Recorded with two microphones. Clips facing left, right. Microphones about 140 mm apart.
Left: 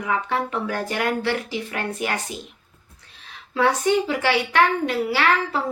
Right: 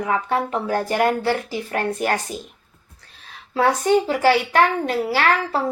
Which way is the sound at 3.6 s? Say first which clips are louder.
Right 2 dB; 40° right (ahead or behind).